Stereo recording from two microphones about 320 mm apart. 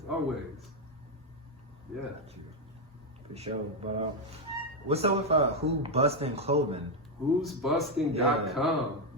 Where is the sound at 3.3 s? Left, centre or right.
Centre.